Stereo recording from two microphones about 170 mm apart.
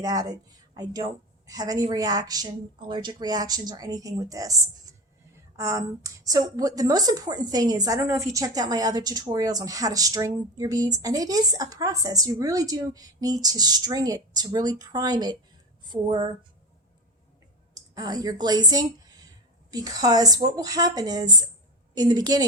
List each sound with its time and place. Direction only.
0.0 s a woman's voice: 20° right (ahead or behind)
17.7 s a woman's voice: 20° right (ahead or behind)